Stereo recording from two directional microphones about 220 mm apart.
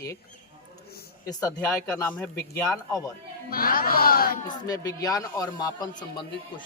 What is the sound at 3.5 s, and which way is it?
Speech, 40° left (ahead or behind).